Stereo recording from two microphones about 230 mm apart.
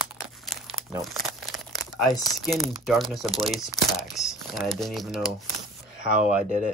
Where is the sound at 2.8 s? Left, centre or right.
Centre.